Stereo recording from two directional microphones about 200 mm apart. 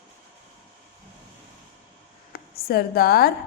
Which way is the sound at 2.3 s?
50° left (ahead or behind).